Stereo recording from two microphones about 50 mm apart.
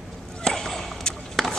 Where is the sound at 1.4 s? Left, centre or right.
Centre.